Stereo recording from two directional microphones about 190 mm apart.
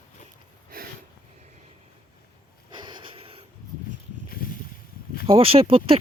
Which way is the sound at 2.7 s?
25° right (ahead or behind).